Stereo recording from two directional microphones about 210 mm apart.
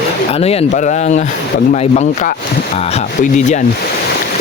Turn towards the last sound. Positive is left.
turn(degrees=35)  # may be behind; listen again after turning